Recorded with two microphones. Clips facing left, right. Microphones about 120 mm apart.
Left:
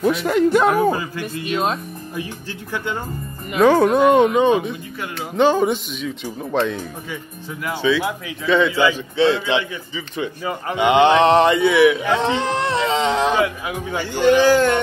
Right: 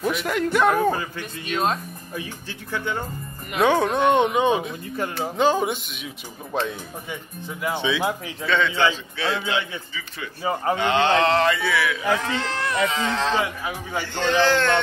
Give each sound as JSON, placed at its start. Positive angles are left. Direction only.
{"t": 0.1, "sound": "speech", "side_deg": 35}
{"t": 0.7, "sound": "speech", "side_deg": 10}
{"t": 3.5, "sound": "speech", "side_deg": 0}
{"t": 4.3, "sound": "speech", "side_deg": -10}
{"t": 7.6, "sound": "speech", "side_deg": -20}
{"t": 8.5, "sound": "speech", "side_deg": 5}
{"t": 9.1, "sound": "speech", "side_deg": 25}